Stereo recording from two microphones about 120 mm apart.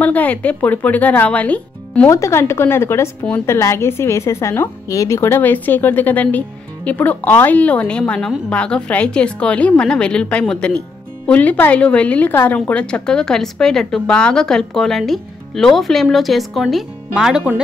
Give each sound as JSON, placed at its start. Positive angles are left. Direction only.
{"t": 0.0, "sound": "a woman's voice", "side_deg": 15}
{"t": 2.0, "sound": "a woman's voice", "side_deg": 25}